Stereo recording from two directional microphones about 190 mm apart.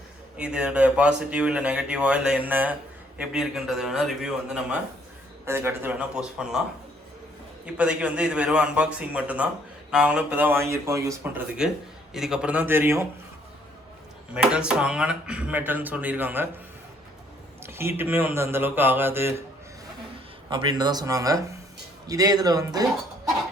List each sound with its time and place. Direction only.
0.3 s speech: 5° right (ahead or behind)
7.6 s speech: 5° right (ahead or behind)
14.3 s speech: 5° right (ahead or behind)
17.6 s speech: 10° right (ahead or behind)
20.5 s speech: 25° right (ahead or behind)